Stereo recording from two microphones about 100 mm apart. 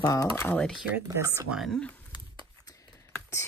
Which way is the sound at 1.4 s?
Centre (ahead or behind).